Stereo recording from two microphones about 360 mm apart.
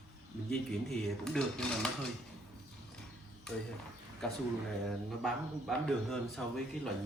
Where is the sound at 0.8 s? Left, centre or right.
Centre.